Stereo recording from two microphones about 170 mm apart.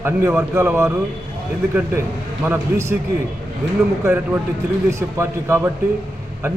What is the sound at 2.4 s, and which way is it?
Speech, 15° right (ahead or behind).